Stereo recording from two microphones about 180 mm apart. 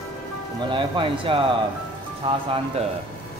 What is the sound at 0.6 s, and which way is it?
Speech, 30° right (ahead or behind).